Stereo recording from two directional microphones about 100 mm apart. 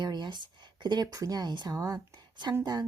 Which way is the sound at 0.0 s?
50° right (ahead or behind).